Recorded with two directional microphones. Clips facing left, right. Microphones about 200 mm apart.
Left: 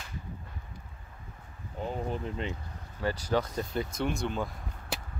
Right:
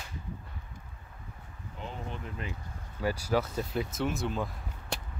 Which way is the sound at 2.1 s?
25° left (ahead or behind).